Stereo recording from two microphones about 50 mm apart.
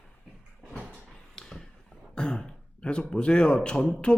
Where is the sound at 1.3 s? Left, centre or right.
Centre.